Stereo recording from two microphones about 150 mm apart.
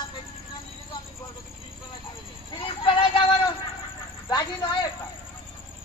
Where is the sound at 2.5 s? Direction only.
35° left (ahead or behind).